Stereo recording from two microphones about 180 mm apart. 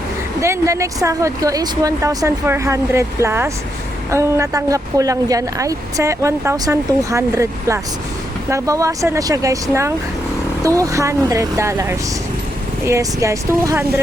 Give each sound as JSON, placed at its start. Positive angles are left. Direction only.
{"t": 0.4, "sound": "speech", "side_deg": -15}
{"t": 10.6, "sound": "speech", "side_deg": -20}